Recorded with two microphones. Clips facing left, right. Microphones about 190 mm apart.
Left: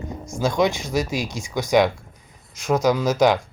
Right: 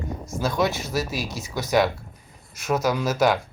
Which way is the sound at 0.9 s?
15° left (ahead or behind).